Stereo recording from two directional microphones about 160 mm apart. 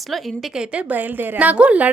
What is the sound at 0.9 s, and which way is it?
Speech, 10° right (ahead or behind).